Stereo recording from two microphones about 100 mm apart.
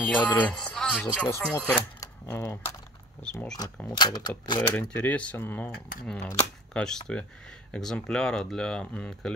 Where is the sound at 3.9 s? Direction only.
45° left (ahead or behind).